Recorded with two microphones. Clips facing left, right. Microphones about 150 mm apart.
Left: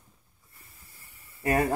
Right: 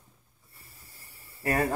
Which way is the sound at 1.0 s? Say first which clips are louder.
Right 2 dB; 35° right (ahead or behind).